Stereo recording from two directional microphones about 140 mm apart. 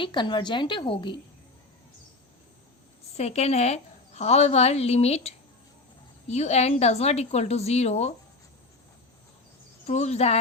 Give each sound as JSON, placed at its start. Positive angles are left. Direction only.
{"t": 0.0, "sound": "a woman's voice", "side_deg": 35}
{"t": 3.2, "sound": "a woman's voice", "side_deg": 50}
{"t": 9.8, "sound": "a woman's voice", "side_deg": 55}